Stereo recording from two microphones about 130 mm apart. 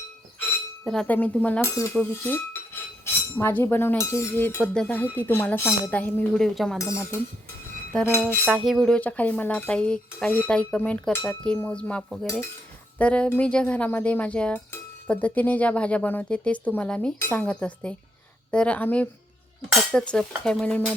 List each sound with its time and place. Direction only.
0.9 s speech: 10° left (ahead or behind)
6.7 s speech: 20° left (ahead or behind)
7.9 s speech: 5° left (ahead or behind)
9.0 s speech: 10° left (ahead or behind)